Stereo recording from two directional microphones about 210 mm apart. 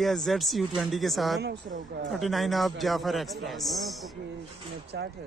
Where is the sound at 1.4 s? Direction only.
45° right (ahead or behind).